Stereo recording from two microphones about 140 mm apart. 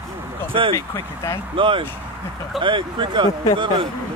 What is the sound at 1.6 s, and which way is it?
Speech, 35° right (ahead or behind).